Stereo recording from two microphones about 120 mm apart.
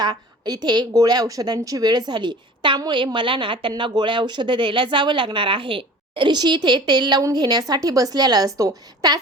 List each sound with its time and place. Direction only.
0.0 s a woman's voice: 35° right (ahead or behind)